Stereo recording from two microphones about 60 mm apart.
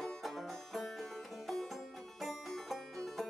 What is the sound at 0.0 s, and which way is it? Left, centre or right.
Banjo, centre.